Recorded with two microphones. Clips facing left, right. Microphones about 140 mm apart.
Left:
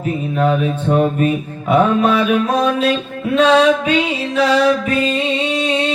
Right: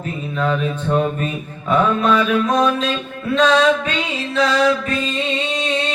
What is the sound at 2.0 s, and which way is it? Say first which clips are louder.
Mantra: left 2 dB; 35° left (ahead or behind).